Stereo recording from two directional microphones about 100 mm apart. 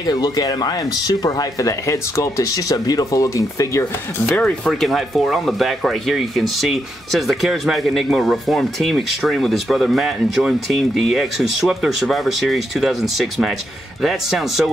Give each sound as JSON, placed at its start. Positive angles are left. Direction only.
{"t": 0.0, "sound": "speech", "side_deg": 40}
{"t": 4.6, "sound": "speech", "side_deg": 0}